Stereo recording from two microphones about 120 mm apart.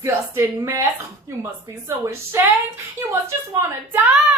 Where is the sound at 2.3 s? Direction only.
20° right (ahead or behind).